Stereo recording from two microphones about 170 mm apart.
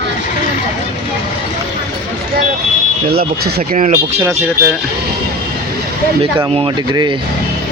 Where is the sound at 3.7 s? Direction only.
50° right (ahead or behind).